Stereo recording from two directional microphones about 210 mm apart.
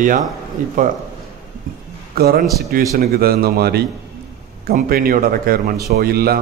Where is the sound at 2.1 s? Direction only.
45° right (ahead or behind).